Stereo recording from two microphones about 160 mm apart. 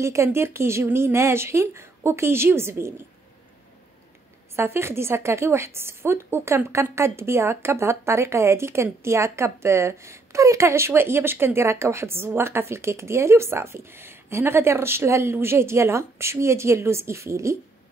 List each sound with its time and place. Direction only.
0.0 s a woman's voice: 15° right (ahead or behind)
4.6 s a woman's voice: 15° right (ahead or behind)